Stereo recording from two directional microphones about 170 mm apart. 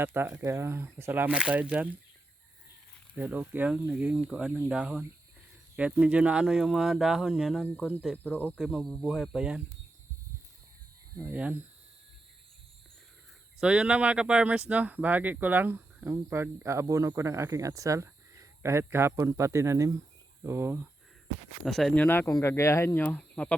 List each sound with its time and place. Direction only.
0.0 s speech: 10° right (ahead or behind)
3.2 s speech: 10° right (ahead or behind)
11.3 s speech: 10° right (ahead or behind)
13.6 s speech: 5° right (ahead or behind)
21.6 s speech: centre (ahead or behind)